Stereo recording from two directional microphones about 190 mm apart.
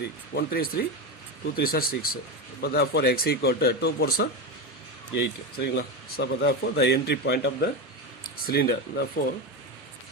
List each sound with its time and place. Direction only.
0.0 s speech: 55° left (ahead or behind)
5.5 s speech: 55° left (ahead or behind)